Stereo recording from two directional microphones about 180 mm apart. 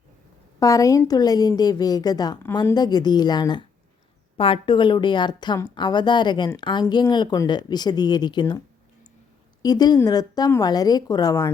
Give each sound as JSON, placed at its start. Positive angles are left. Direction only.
{"t": 0.6, "sound": "a woman's voice", "side_deg": 20}